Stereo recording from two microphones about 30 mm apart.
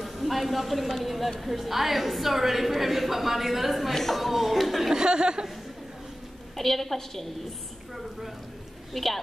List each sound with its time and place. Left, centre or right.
0.0 s a woman's voice: centre
3.9 s a woman's voice: centre
4.2 s a woman's voice: centre
4.9 s speech: right
6.5 s a woman's voice: centre
8.9 s a woman's voice: centre